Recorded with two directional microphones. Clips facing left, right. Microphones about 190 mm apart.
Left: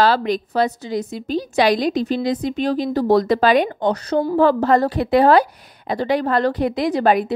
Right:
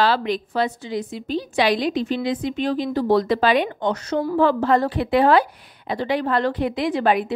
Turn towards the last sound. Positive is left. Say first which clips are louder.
# left 3 dB
turn(degrees=40)  # may be behind; listen again after turning